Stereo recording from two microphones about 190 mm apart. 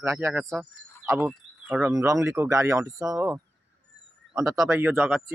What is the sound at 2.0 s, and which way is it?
Speech, 15° right (ahead or behind).